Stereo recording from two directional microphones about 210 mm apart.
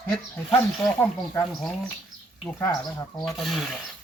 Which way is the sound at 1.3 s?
20° left (ahead or behind).